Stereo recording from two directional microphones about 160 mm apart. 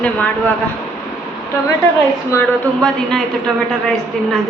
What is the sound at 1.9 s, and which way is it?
Speech, 15° left (ahead or behind).